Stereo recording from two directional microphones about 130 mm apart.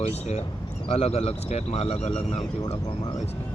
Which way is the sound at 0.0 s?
55° left (ahead or behind).